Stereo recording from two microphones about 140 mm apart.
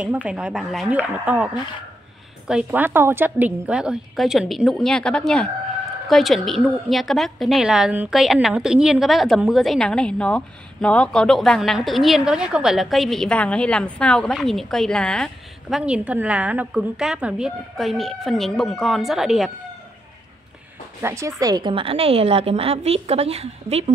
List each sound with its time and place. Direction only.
0.0 s a woman's voice: 10° right (ahead or behind)
15.8 s a woman's voice: 10° right (ahead or behind)
21.0 s a woman's voice: 20° right (ahead or behind); by 23.9 s 50° right (ahead or behind)